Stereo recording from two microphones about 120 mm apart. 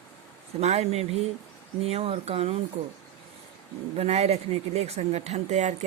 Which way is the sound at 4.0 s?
65° right (ahead or behind).